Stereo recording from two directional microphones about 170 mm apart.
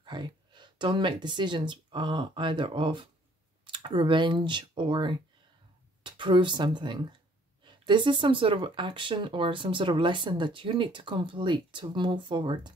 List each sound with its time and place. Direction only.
0.0 s speech: 25° right (ahead or behind)